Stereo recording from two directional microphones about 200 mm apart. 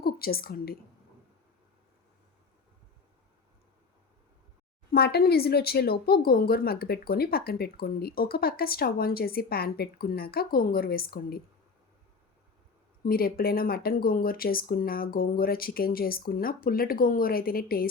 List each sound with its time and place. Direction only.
0.0 s a woman's voice: 50° left (ahead or behind)
4.9 s speech: 50° left (ahead or behind)
13.1 s speech: 50° left (ahead or behind)